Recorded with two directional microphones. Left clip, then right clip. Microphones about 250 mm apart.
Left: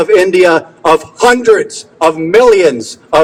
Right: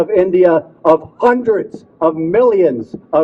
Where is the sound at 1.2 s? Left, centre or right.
Left.